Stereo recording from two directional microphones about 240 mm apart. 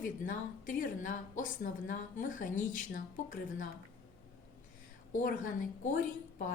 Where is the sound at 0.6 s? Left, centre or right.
Left.